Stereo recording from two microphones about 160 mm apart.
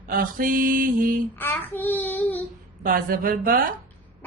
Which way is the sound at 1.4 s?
10° left (ahead or behind).